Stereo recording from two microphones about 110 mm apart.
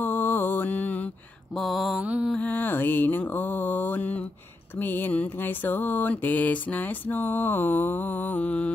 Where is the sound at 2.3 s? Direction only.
15° left (ahead or behind).